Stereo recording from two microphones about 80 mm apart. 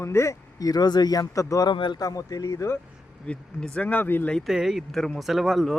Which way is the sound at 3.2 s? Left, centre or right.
Centre.